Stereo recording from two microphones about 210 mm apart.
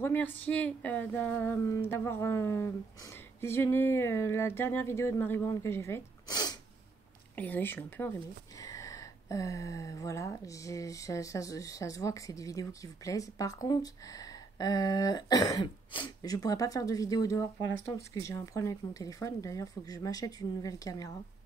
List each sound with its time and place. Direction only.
0.0 s speech: 10° left (ahead or behind)
7.3 s speech: 10° left (ahead or behind)